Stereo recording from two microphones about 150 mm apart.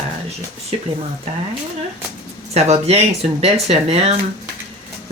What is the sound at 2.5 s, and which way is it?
Speech, 45° right (ahead or behind).